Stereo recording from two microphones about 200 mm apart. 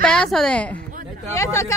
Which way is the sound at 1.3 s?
15° left (ahead or behind).